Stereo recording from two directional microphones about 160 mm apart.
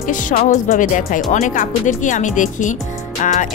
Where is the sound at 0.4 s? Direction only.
50° left (ahead or behind).